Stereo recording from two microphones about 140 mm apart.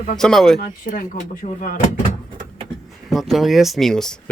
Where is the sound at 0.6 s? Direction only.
90° left.